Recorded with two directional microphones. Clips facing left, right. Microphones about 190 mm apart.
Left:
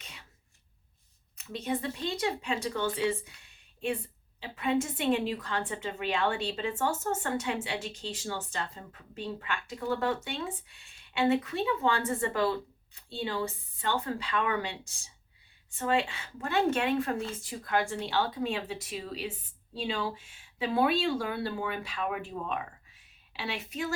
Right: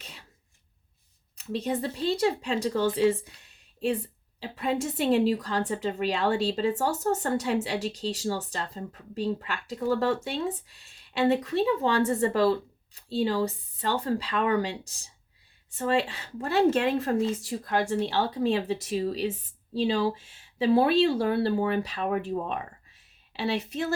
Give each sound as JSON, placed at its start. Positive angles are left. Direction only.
{"t": 1.6, "sound": "a woman's voice", "side_deg": -35}
{"t": 4.4, "sound": "a woman's voice", "side_deg": -35}
{"t": 23.0, "sound": "a sound", "side_deg": -40}